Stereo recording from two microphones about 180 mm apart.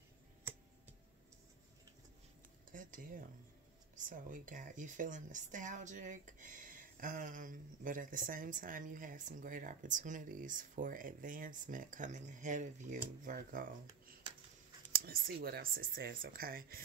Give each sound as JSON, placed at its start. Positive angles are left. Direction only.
{"t": 2.7, "sound": "dishes", "side_deg": -50}
{"t": 4.1, "sound": "speech", "side_deg": -50}
{"t": 15.0, "sound": "speech", "side_deg": -55}